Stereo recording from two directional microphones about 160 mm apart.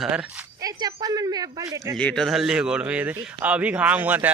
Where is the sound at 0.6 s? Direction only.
25° right (ahead or behind).